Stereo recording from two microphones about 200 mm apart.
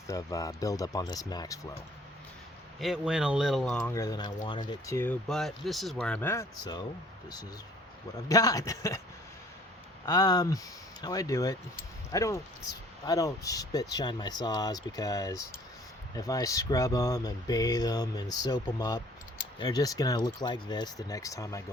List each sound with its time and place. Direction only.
0.1 s speech: 15° left (ahead or behind)
2.8 s speech: 5° right (ahead or behind)
3.9 s speech: 20° left (ahead or behind)
5.3 s speech: centre (ahead or behind); by 6.8 s 15° left (ahead or behind)
8.3 s speech: 20° left (ahead or behind)
10.1 s speech: 20° left (ahead or behind)